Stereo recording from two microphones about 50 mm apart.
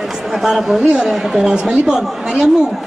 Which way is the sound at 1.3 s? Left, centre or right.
Centre.